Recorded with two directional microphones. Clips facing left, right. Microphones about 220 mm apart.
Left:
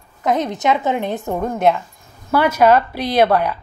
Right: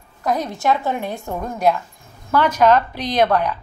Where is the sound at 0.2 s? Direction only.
20° left (ahead or behind).